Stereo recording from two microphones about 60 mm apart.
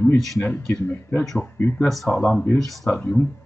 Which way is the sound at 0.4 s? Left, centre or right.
Left.